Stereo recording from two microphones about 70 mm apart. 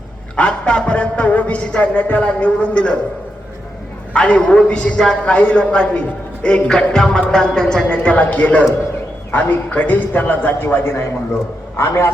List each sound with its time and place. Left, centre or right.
0.3 s speech: centre
4.1 s a man's voice: centre; by 12.1 s left